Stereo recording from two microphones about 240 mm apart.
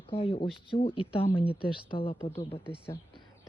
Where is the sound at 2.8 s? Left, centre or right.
Centre.